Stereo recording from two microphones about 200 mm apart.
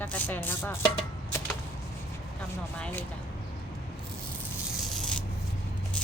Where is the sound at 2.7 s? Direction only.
5° left (ahead or behind).